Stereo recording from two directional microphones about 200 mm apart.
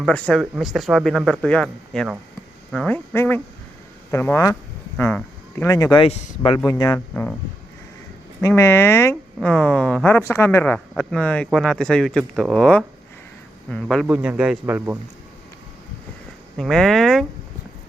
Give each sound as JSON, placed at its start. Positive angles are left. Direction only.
{"t": 0.0, "sound": "speech", "side_deg": 5}
{"t": 6.7, "sound": "speech", "side_deg": 20}
{"t": 7.1, "sound": "speech", "side_deg": 5}
{"t": 8.4, "sound": "speech", "side_deg": 15}
{"t": 16.6, "sound": "speech", "side_deg": 0}